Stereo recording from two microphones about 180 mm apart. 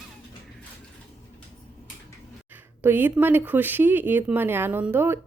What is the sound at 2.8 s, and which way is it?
Speech, 10° right (ahead or behind).